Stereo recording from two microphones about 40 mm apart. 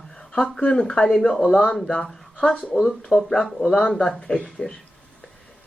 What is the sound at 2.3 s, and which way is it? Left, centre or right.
Speech, left.